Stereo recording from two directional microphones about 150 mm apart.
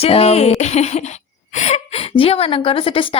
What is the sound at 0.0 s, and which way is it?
A woman's voice, 40° left (ahead or behind).